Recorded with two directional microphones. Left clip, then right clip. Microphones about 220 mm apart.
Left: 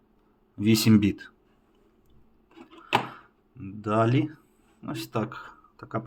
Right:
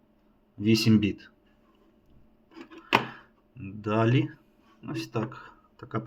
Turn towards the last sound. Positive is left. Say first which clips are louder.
# left 2 dB
turn(degrees=5)  # may be behind; listen again after turning